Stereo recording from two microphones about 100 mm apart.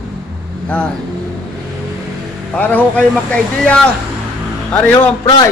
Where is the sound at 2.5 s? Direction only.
15° left (ahead or behind).